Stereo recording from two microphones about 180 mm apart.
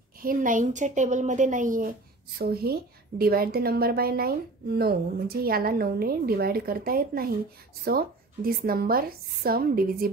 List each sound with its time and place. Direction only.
0.2 s a woman's voice: 50° right (ahead or behind)